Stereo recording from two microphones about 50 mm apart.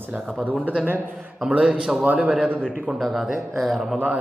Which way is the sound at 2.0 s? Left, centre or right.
Right.